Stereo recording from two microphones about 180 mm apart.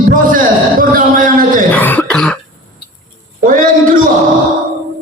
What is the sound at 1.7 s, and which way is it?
Throat clearing, 10° left (ahead or behind).